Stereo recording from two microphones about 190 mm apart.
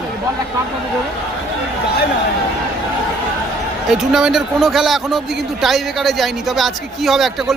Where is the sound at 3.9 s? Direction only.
Centre (ahead or behind).